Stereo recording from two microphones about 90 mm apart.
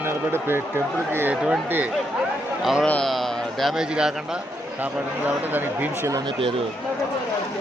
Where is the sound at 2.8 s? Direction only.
5° left (ahead or behind).